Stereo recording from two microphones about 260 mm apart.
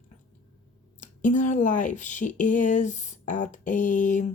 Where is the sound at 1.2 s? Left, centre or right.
Left.